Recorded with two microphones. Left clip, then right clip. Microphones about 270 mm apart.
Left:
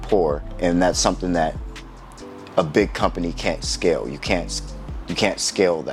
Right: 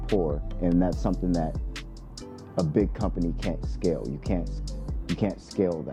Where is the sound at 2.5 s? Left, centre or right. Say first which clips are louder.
Left 8 dB; centre.